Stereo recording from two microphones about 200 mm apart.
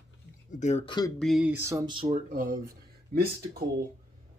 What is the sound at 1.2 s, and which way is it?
Speech, centre (ahead or behind).